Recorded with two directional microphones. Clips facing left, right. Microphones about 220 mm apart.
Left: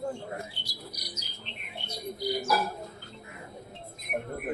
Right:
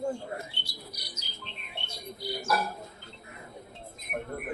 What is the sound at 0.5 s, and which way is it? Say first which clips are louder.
Bird: left 1 dB; 25° right (ahead or behind).